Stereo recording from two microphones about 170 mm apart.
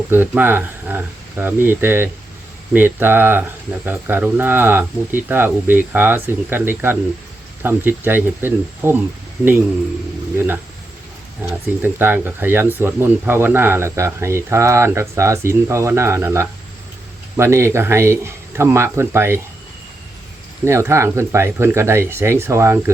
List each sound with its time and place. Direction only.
0.1 s speech: 10° right (ahead or behind)
10.3 s speech: 10° right (ahead or behind)
20.7 s speech: 15° right (ahead or behind)